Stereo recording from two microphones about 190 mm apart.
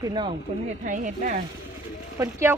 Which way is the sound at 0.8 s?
40° right (ahead or behind).